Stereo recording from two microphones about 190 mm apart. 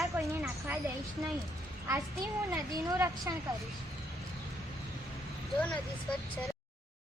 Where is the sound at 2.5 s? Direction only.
15° right (ahead or behind).